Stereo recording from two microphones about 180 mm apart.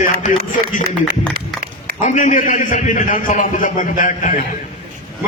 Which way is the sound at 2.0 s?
45° left (ahead or behind).